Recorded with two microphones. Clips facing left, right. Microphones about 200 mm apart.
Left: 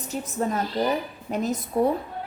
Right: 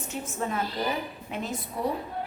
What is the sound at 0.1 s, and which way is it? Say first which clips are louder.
A woman's voice: left 5 dB; 35° left (ahead or behind).